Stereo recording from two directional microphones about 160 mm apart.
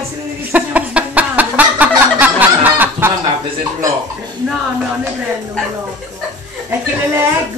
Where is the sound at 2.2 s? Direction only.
10° right (ahead or behind).